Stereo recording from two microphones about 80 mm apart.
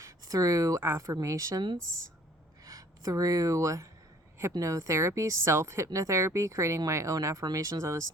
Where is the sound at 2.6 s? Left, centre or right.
Right.